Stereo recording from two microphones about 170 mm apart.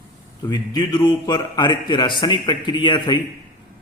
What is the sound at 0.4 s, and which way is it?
A man's voice, 25° left (ahead or behind).